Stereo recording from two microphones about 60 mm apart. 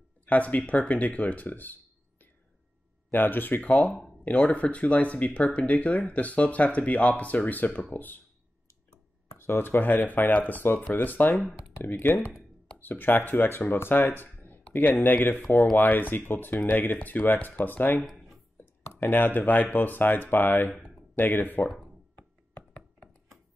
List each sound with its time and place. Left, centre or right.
0.2 s speech: left
3.1 s speech: left
9.4 s speech: left
18.1 s a sound: centre
18.6 s speech: left